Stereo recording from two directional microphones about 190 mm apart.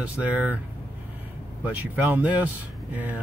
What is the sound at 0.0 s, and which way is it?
Speech, 10° right (ahead or behind).